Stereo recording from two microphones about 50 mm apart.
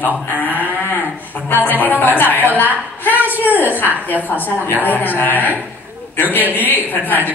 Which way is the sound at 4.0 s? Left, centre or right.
Left.